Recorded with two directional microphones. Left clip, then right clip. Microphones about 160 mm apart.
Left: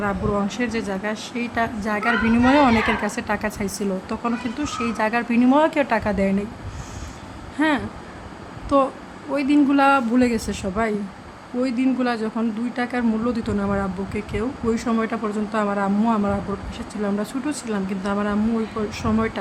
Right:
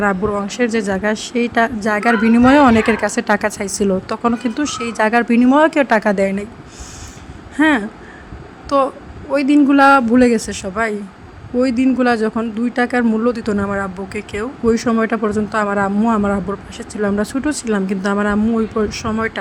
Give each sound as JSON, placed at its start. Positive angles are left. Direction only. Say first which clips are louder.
{"t": 0.0, "sound": "speech", "louder": "right 6 dB", "side_deg": -40}
{"t": 7.5, "sound": "speech", "louder": "right 7 dB", "side_deg": -35}